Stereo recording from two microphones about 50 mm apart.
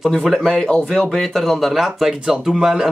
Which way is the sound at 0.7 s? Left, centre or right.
Centre.